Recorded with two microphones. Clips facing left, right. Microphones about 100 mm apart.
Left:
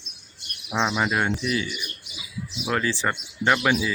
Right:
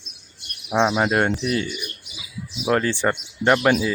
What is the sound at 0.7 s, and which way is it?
Speech, 45° right (ahead or behind).